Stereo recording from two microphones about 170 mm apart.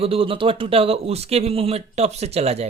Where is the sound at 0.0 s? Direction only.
35° right (ahead or behind).